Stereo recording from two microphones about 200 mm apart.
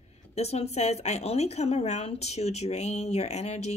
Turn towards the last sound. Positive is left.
turn(degrees=35)  # may be behind; listen again after turning